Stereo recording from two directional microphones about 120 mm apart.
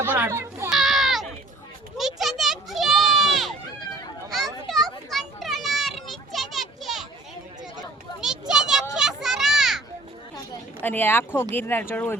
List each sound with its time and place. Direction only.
0.0 s children playing: 15° right (ahead or behind)
0.7 s children playing: centre (ahead or behind)
2.0 s a sound: centre (ahead or behind)
4.3 s children playing: centre (ahead or behind)
8.2 s children playing: 5° right (ahead or behind)
10.8 s speech: 15° left (ahead or behind)